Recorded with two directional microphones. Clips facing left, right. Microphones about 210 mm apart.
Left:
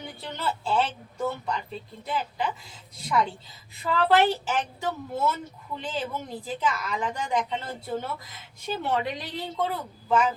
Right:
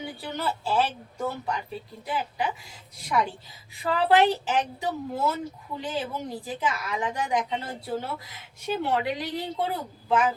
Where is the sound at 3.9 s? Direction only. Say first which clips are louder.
Right 1 dB; 15° right (ahead or behind).